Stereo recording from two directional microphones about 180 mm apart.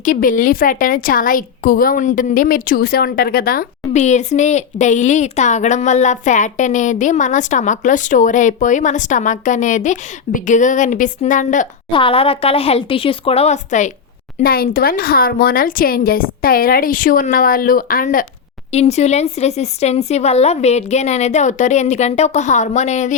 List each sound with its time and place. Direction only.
0.0 s a woman's voice: 50° left (ahead or behind)
3.9 s a woman's voice: 40° left (ahead or behind)
11.9 s a woman's voice: 30° left (ahead or behind)
14.4 s a woman's voice: 55° left (ahead or behind)
18.7 s a woman's voice: 35° left (ahead or behind)